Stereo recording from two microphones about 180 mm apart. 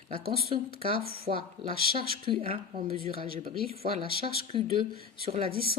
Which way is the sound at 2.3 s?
35° right (ahead or behind).